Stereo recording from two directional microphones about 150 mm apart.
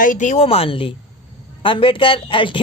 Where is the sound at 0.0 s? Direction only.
60° left (ahead or behind).